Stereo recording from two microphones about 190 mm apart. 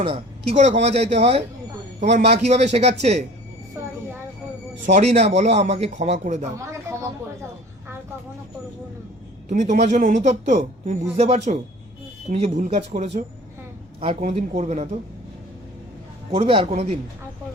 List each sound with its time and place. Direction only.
0.0 s speech: 30° right (ahead or behind)
4.9 s speech: 35° right (ahead or behind)
9.5 s speech: 40° right (ahead or behind)
16.3 s speech: 30° right (ahead or behind)